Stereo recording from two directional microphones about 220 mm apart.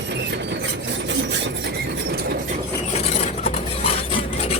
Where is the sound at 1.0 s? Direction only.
55° right (ahead or behind).